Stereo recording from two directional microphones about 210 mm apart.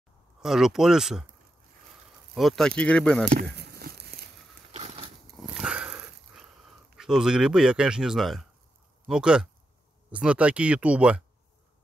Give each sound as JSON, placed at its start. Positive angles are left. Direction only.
{"t": 0.4, "sound": "speech", "side_deg": 0}
{"t": 2.3, "sound": "speech", "side_deg": 0}
{"t": 3.5, "sound": "a sound", "side_deg": -50}
{"t": 4.7, "sound": "a sound", "side_deg": -30}
{"t": 5.6, "sound": "dog", "side_deg": -5}
{"t": 7.0, "sound": "speech", "side_deg": -5}